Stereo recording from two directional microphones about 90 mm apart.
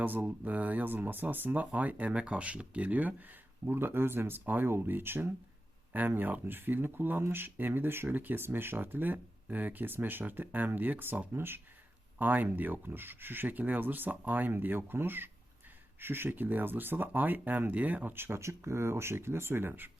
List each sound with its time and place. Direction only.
0.0 s speech: 20° right (ahead or behind)